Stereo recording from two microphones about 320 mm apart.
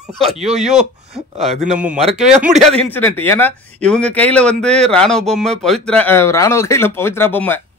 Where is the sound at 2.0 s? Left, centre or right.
Centre.